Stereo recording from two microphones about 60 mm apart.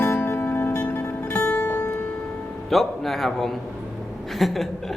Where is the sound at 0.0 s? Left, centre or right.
Left.